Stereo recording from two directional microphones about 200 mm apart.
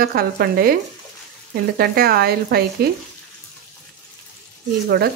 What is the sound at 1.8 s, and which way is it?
Speech, 50° right (ahead or behind).